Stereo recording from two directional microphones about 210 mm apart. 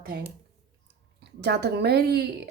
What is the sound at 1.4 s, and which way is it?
Speech, 50° right (ahead or behind).